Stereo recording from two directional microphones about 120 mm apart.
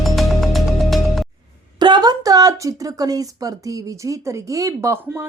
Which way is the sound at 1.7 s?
40° right (ahead or behind).